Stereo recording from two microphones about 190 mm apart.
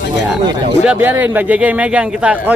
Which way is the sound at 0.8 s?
10° right (ahead or behind).